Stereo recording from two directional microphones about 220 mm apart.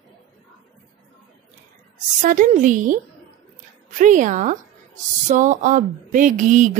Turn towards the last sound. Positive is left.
turn(degrees=-35)  # may be behind; listen again after turning